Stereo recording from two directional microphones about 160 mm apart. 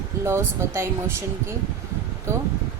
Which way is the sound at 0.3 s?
15° right (ahead or behind).